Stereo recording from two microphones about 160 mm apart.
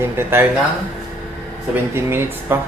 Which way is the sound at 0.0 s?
15° right (ahead or behind).